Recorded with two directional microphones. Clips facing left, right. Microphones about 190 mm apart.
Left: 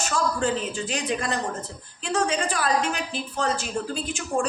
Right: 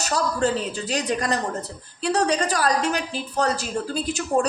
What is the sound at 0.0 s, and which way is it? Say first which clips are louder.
Speech: right 2 dB; 40° right (ahead or behind).